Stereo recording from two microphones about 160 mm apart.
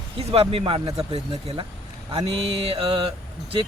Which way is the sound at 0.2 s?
35° right (ahead or behind).